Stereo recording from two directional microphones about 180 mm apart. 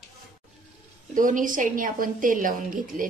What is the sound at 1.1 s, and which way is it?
A woman's voice, 45° right (ahead or behind).